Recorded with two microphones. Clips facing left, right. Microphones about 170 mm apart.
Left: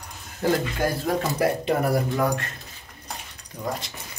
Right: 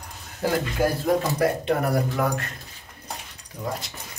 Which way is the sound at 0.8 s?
5° right (ahead or behind).